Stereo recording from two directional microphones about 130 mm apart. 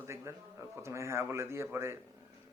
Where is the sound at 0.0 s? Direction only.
20° right (ahead or behind).